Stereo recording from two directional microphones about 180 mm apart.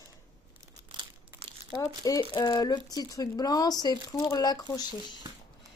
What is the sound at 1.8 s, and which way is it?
Speech, 20° left (ahead or behind).